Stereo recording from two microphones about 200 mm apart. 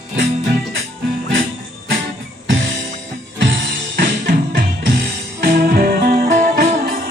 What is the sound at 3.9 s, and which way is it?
Music, 45° right (ahead or behind).